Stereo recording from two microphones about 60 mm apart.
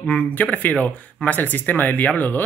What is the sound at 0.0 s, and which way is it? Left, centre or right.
Speech, left.